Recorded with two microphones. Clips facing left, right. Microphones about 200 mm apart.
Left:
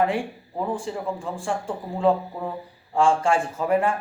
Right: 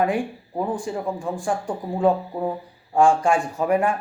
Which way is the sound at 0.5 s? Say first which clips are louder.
Right 2 dB; 15° right (ahead or behind).